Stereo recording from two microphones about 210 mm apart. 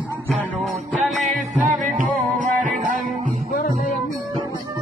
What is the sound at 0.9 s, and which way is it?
Music, centre (ahead or behind).